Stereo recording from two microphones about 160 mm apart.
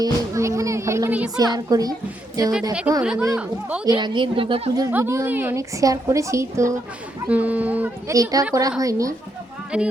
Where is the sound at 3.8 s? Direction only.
30° right (ahead or behind).